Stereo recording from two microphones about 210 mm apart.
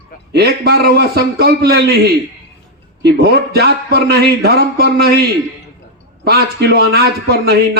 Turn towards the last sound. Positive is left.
turn(degrees=-50)  # may be behind; listen again after turning